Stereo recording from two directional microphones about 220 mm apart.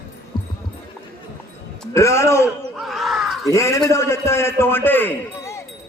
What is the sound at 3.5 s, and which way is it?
A man's voice, 15° left (ahead or behind).